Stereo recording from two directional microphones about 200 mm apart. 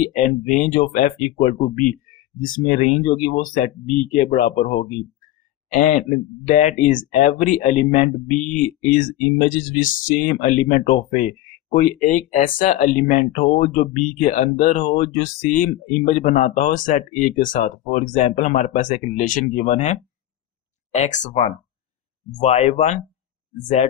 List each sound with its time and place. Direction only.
0.0 s speech: 40° left (ahead or behind)